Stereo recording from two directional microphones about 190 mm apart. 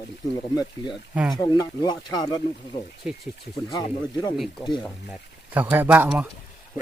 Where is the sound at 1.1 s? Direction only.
5° right (ahead or behind).